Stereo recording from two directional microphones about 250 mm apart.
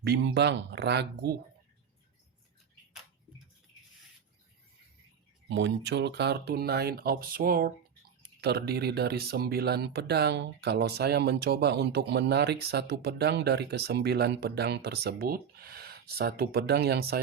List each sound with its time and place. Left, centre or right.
0.0 s speech: right
5.5 s speech: right